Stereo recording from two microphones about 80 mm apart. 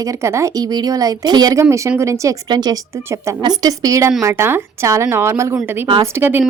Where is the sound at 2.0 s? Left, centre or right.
Right.